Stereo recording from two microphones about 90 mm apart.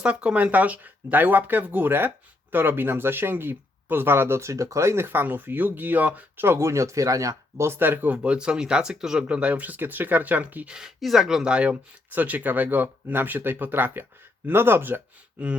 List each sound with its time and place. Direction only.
0.0 s speech: 15° right (ahead or behind)
10.8 s speech: 5° right (ahead or behind)